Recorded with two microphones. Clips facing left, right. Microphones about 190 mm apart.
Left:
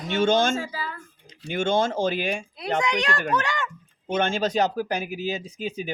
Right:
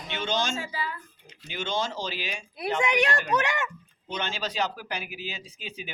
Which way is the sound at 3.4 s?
20° right (ahead or behind).